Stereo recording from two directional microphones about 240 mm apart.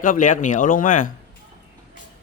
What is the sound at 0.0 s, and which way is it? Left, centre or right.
Speech, left.